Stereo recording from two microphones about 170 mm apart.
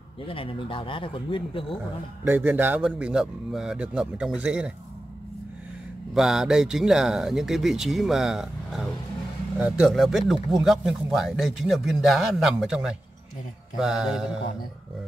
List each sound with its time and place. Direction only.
0.3 s speech: 30° left (ahead or behind)
2.2 s speech: 10° right (ahead or behind)
6.1 s speech: centre (ahead or behind)